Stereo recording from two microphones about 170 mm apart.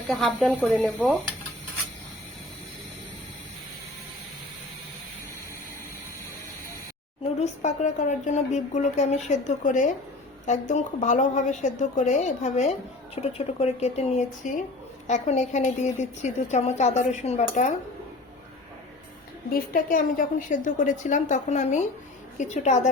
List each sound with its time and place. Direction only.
0.1 s speech: centre (ahead or behind)
7.3 s a woman's voice: 45° left (ahead or behind)
19.5 s a woman's voice: 55° left (ahead or behind)